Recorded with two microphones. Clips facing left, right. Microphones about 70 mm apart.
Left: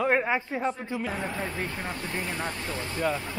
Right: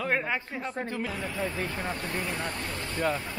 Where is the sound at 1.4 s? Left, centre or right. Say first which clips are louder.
Right 1 dB; left.